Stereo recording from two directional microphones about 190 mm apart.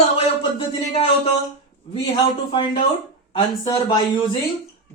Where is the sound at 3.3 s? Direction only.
25° left (ahead or behind).